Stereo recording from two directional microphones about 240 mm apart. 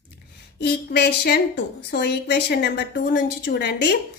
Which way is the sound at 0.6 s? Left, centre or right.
Left.